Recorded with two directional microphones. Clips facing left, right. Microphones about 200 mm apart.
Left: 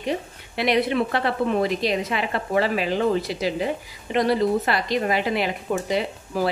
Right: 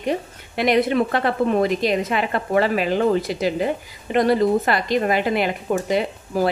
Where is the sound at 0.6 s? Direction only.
45° right (ahead or behind).